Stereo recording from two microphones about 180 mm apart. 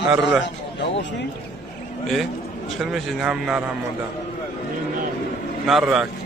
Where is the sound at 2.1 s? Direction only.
Centre (ahead or behind).